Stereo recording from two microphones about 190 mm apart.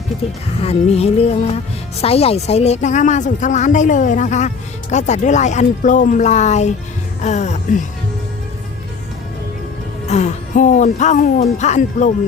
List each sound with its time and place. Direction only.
0.6 s a woman's voice: 30° left (ahead or behind)
10.1 s a woman's voice: 40° left (ahead or behind)